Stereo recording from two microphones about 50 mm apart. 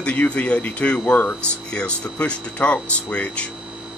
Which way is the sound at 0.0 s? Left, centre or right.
Left.